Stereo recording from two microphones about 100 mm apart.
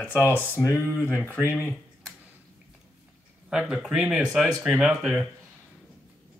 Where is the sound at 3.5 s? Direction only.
Centre (ahead or behind).